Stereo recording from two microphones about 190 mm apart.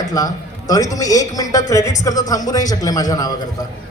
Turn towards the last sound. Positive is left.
turn(degrees=20)  # may be behind; listen again after turning